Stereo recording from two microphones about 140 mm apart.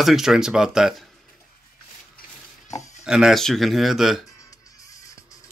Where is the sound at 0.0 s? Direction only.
Centre (ahead or behind).